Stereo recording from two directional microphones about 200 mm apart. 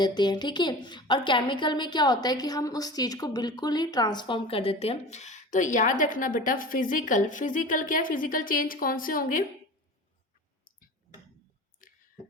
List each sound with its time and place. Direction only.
0.0 s a woman's voice: 20° left (ahead or behind); by 9.4 s 45° left (ahead or behind)